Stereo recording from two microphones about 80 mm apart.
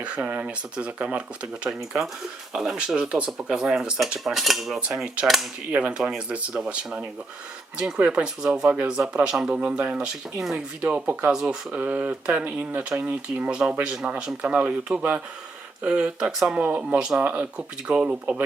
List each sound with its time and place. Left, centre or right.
0.3 s speech: centre
4.2 s cap gun: centre
4.8 s cap gun: centre
5.7 s speech: centre